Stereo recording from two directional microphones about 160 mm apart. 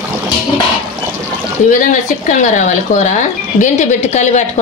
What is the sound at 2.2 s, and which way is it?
Speech, 50° left (ahead or behind).